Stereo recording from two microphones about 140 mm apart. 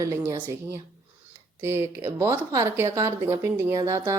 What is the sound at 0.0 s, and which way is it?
Speech, 20° right (ahead or behind).